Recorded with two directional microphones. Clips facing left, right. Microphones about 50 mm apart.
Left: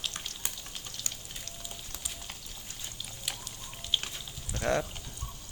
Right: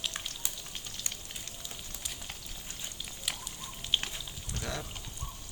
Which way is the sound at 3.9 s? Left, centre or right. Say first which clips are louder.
Even; right.